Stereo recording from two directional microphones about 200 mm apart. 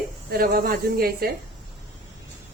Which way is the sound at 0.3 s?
50° right (ahead or behind).